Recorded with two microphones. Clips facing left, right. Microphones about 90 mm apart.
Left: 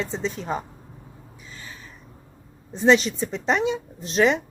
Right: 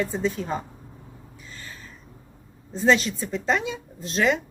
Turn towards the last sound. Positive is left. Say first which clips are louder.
# left 3 dB
turn(degrees=20)  # may be behind; listen again after turning